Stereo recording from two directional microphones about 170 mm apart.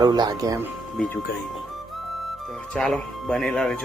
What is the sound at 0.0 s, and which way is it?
Speech, 20° right (ahead or behind).